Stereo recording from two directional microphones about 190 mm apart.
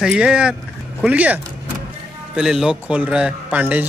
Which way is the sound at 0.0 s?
5° right (ahead or behind).